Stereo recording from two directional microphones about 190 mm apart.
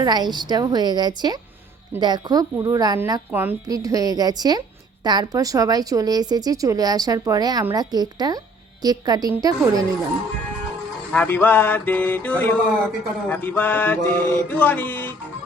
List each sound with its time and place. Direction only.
0.0 s speech: 20° right (ahead or behind)
11.1 s mantra: 10° left (ahead or behind)